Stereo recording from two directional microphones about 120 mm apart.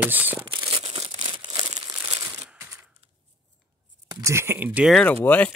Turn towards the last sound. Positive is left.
turn(degrees=15)  # may be behind; listen again after turning